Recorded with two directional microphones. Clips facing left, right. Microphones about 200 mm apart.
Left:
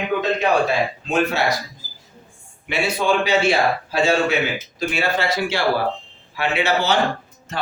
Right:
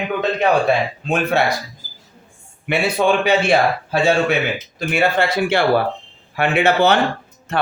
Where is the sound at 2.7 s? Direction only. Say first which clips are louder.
Right 3 dB; 55° right (ahead or behind).